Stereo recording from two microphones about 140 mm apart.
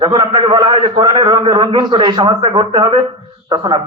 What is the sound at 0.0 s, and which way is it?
A man's voice, 35° right (ahead or behind).